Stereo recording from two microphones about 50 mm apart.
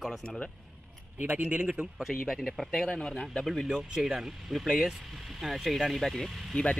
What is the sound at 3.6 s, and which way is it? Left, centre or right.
Speech, centre.